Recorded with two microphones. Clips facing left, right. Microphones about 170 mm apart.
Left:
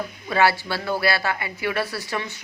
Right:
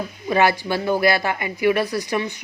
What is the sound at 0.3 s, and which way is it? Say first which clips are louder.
A woman's voice: right 2 dB; 20° right (ahead or behind).